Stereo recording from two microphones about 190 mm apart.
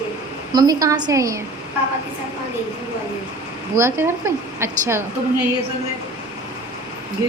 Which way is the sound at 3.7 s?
15° right (ahead or behind).